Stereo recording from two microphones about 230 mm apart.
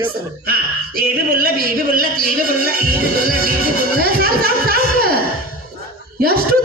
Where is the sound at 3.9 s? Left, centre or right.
Right.